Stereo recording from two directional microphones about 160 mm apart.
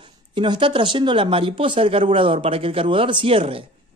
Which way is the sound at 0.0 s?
30° right (ahead or behind).